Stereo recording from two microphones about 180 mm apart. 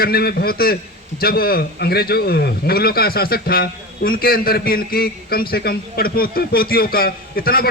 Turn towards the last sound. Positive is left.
turn(degrees=55)  # may be behind; listen again after turning